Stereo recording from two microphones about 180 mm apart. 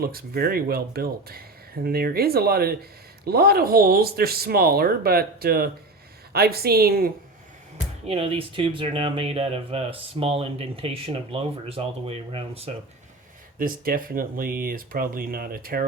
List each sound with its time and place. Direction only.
0.0 s speech: 55° right (ahead or behind)
8.0 s speech: 30° right (ahead or behind)
13.6 s speech: 50° right (ahead or behind)